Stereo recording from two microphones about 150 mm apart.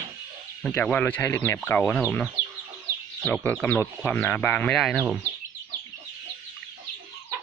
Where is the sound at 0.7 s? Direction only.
10° left (ahead or behind).